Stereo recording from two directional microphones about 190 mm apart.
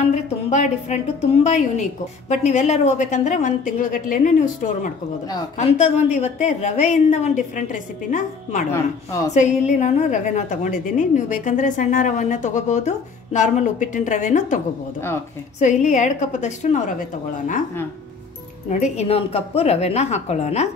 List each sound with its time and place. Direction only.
0.0 s a woman's voice: 40° left (ahead or behind)
5.6 s a woman's voice: 35° left (ahead or behind)
8.7 s a woman's voice: 15° left (ahead or behind)
9.3 s a woman's voice: 40° left (ahead or behind)
15.0 s a woman's voice: 15° left (ahead or behind)
15.6 s a woman's voice: 40° left (ahead or behind)
18.7 s a woman's voice: 35° left (ahead or behind)